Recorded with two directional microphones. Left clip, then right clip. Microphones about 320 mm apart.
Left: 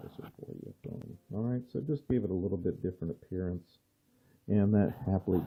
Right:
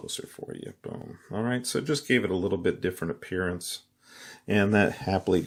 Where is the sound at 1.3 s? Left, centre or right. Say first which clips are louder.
Right 8 dB; centre.